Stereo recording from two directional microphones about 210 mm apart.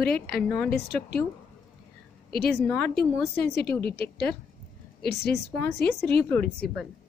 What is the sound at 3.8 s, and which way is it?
A woman's voice, 50° left (ahead or behind).